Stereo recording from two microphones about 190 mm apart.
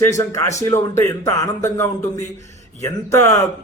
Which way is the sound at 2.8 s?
15° left (ahead or behind).